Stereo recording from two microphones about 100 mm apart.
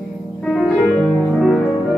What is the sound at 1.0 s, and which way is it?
Music, centre (ahead or behind).